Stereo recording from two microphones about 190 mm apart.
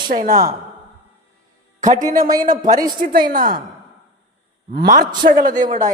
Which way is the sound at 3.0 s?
45° right (ahead or behind).